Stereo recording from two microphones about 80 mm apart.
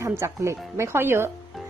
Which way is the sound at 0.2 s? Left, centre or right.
Right.